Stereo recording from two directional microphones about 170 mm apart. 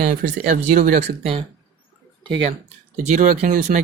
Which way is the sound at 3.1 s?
45° right (ahead or behind).